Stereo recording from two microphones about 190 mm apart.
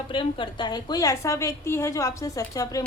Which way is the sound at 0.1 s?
25° left (ahead or behind).